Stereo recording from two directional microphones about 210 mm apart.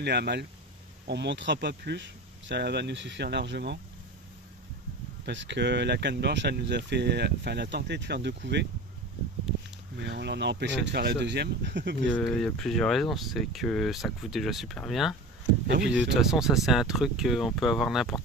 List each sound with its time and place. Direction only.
0.0 s speech: 50° right (ahead or behind)
5.2 s speech: 55° right (ahead or behind)
9.9 s speech: 55° right (ahead or behind)
12.1 s speech: centre (ahead or behind)